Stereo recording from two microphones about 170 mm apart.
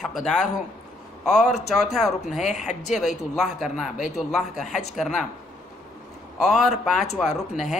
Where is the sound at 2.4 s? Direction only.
45° left (ahead or behind).